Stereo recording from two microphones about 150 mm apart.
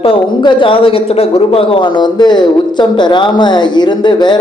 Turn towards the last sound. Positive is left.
turn(degrees=30)  # may be behind; listen again after turning